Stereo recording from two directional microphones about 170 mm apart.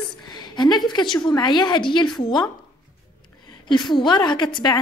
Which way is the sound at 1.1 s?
25° left (ahead or behind).